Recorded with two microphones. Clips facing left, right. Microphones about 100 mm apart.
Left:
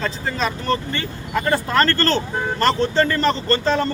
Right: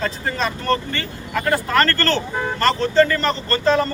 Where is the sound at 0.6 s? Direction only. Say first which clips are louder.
Right 1 dB; 20° left (ahead or behind).